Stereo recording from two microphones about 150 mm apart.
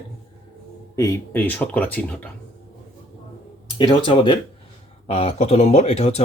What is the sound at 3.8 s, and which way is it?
Speech, 35° left (ahead or behind).